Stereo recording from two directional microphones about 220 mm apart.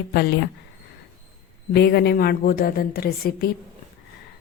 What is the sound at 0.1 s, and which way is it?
Speech, 45° left (ahead or behind).